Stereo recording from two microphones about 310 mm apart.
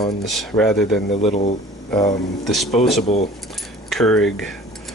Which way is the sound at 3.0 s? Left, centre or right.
Left.